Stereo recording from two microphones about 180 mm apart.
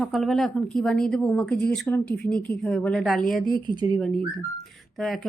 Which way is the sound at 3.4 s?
25° right (ahead or behind).